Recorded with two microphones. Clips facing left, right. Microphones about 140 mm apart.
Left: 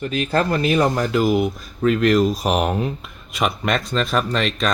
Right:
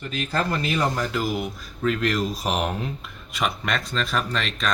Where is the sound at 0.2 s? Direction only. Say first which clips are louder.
Left 5 dB; 55° left (ahead or behind).